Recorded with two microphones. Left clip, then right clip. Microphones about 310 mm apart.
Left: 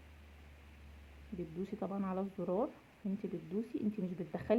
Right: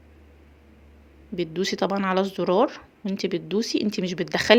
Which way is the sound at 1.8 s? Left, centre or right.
Right.